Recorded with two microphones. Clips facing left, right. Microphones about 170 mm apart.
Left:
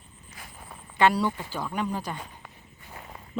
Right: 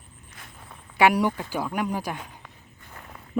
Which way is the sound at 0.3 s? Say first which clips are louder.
Left 2 dB; 5° left (ahead or behind).